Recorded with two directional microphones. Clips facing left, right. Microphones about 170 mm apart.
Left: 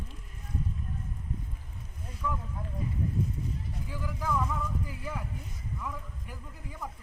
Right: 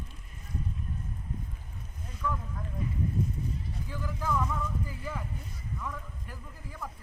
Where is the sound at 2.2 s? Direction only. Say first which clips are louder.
Right 1 dB; 15° left (ahead or behind).